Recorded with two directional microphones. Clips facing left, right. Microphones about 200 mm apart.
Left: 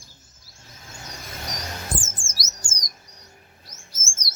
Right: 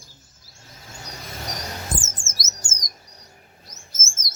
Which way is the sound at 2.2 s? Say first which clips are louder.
Right 1 dB; 20° right (ahead or behind).